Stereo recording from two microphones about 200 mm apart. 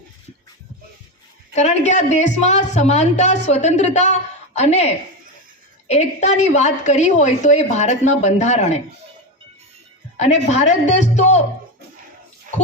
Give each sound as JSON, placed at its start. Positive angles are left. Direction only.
{"t": 1.5, "sound": "a woman's voice", "side_deg": 35}
{"t": 5.9, "sound": "a woman's voice", "side_deg": 35}
{"t": 10.2, "sound": "a woman's voice", "side_deg": 35}